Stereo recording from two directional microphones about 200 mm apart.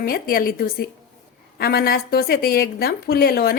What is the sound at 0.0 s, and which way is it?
A woman's voice, 45° left (ahead or behind).